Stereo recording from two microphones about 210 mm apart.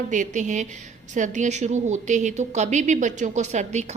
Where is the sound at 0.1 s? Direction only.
35° right (ahead or behind).